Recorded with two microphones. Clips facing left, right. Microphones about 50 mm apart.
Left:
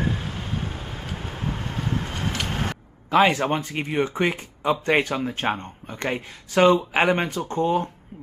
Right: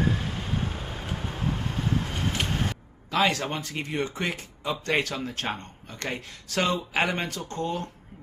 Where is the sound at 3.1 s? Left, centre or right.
Left.